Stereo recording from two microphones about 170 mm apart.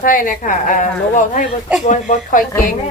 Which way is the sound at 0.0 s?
55° left (ahead or behind).